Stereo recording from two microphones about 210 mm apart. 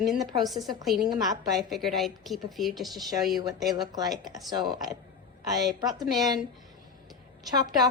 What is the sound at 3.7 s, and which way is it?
Speech, 20° right (ahead or behind).